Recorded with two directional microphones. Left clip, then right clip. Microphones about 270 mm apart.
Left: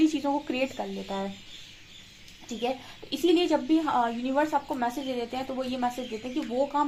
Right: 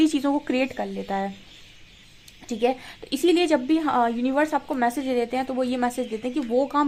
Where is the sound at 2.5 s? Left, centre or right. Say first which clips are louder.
Right 7 dB; right.